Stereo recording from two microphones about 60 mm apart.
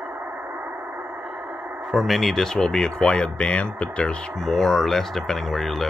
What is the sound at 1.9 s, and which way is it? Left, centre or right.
Speech, centre.